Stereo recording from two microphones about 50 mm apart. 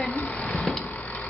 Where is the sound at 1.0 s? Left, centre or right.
Left.